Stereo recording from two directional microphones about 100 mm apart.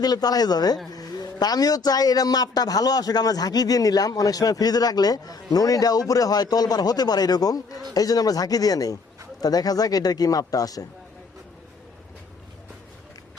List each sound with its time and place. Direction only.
0.0 s a man's voice: 40° left (ahead or behind)